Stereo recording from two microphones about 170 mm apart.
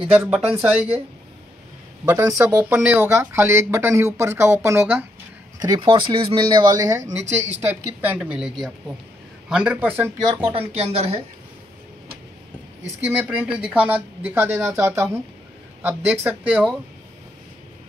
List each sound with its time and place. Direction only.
0.1 s speech: 10° right (ahead or behind)
2.0 s speech: 15° right (ahead or behind)
5.6 s speech: 25° right (ahead or behind)
10.8 s a woman's voice: 35° right (ahead or behind)
13.2 s speech: 10° right (ahead or behind)